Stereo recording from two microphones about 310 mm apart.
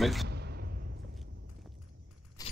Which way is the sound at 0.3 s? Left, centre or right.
Right.